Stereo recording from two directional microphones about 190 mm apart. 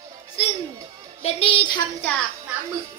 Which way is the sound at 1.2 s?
30° left (ahead or behind).